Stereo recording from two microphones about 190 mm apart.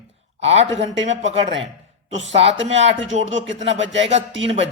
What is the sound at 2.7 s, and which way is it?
Speech, 75° right (ahead or behind).